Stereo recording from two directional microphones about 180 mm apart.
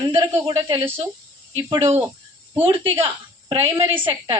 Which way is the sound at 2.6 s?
30° right (ahead or behind).